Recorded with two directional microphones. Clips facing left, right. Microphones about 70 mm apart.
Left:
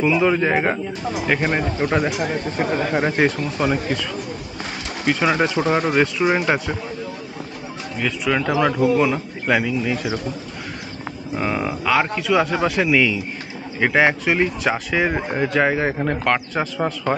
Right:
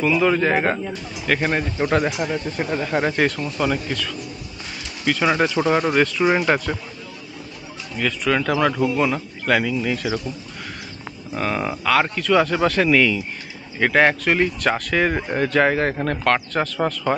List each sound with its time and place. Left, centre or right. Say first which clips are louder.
0.0 s speech: left 1 dB; centre
2.1 s speech: left 1 dB; left
2.5 s speech: left 3 dB; left
2.9 s speech: right 1 dB; centre
5.2 s speech: right 1 dB; centre
8.0 s speech: even; centre
11.3 s speech: left 1 dB; centre